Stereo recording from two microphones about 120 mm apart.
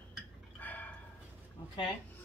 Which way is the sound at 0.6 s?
15° left (ahead or behind).